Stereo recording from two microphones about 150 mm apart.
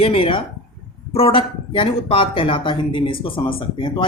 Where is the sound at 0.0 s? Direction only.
40° left (ahead or behind).